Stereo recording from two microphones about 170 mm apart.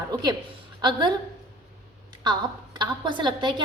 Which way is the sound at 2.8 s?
25° right (ahead or behind).